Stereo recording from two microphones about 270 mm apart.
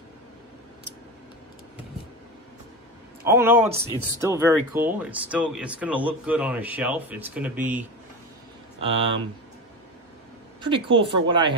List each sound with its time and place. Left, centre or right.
3.3 s a woman's voice: centre
8.7 s speech: centre
10.6 s a woman's voice: centre